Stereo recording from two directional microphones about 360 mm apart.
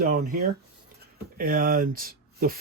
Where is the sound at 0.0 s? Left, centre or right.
Right.